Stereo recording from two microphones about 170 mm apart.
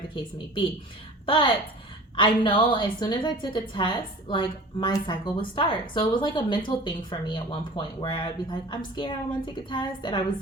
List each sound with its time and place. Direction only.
1.3 s a woman's voice: 30° left (ahead or behind)